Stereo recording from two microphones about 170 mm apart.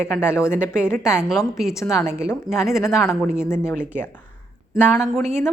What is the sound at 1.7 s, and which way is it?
Speech, 15° left (ahead or behind).